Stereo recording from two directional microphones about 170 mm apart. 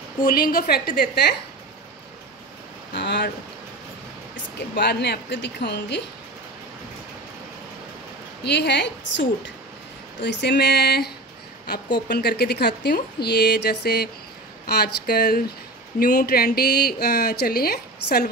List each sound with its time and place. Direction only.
0.2 s speech: 60° left (ahead or behind)
2.9 s speech: 90° left
4.7 s speech: 75° left (ahead or behind)
8.5 s a woman's voice: 90° left
10.5 s speech: 70° left (ahead or behind)